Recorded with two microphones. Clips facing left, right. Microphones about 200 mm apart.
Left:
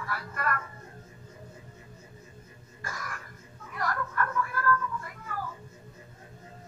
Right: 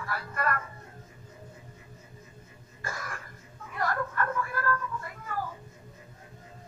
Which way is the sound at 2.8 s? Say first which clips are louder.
Right 2 dB; 25° right (ahead or behind).